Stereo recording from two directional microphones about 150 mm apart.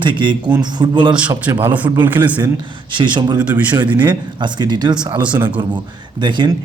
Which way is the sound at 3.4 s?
10° right (ahead or behind).